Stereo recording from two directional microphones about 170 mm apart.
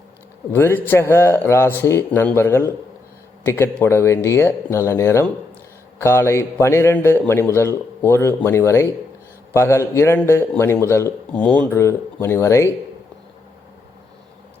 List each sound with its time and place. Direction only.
0.5 s a man's voice: 10° left (ahead or behind)